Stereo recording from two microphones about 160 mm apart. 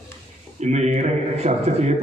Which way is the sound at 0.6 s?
45° right (ahead or behind).